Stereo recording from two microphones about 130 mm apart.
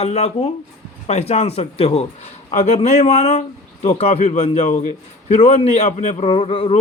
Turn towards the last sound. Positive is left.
turn(degrees=45)  # may be behind; listen again after turning